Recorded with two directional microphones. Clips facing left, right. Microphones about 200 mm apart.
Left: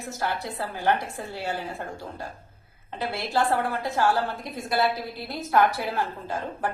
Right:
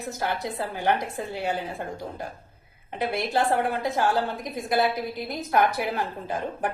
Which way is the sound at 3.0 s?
20° right (ahead or behind).